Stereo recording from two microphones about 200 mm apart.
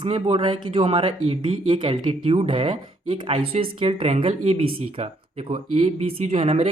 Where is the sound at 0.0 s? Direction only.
25° right (ahead or behind).